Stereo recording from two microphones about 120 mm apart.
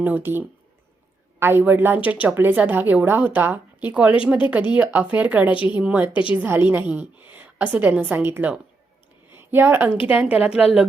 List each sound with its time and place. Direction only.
0.0 s a woman's voice: 15° right (ahead or behind)
9.3 s a sound: 20° right (ahead or behind)
10.0 s speech: 10° right (ahead or behind)